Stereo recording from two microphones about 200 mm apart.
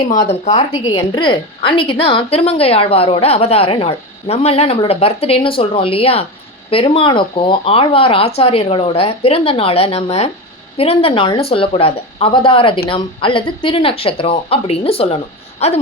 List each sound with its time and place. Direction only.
0.3 s a woman's voice: 35° left (ahead or behind)
0.7 s a woman's voice: 20° left (ahead or behind)